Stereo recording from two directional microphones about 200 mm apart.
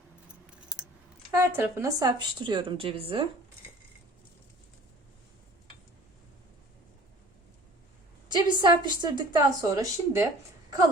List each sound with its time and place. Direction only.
1.3 s a woman's voice: 15° right (ahead or behind)
8.3 s a woman's voice: 20° right (ahead or behind)